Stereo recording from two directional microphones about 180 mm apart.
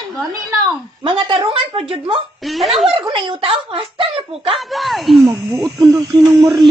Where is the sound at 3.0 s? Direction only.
25° right (ahead or behind).